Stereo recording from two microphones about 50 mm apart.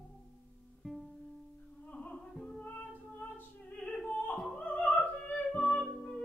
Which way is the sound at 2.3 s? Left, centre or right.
Centre.